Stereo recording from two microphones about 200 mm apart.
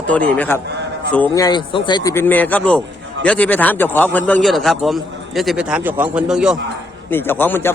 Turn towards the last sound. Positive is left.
turn(degrees=10)  # may be behind; listen again after turning